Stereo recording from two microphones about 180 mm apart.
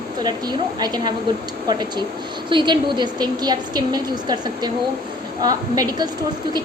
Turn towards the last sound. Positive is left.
turn(degrees=-20)  # may be behind; listen again after turning